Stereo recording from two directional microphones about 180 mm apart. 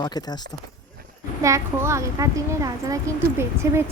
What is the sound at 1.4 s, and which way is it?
Speech, 15° right (ahead or behind).